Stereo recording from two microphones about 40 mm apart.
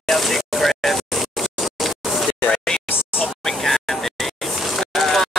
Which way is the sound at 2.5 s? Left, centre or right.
Centre.